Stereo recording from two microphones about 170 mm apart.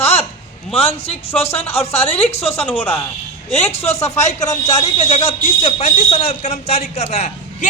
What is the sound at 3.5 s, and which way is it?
Speech, 40° left (ahead or behind).